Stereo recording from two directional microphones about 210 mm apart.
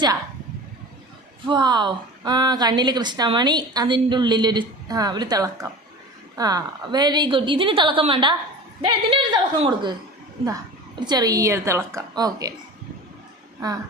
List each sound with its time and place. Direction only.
1.5 s a woman's voice: 20° right (ahead or behind)
11.0 s a woman's voice: 20° right (ahead or behind)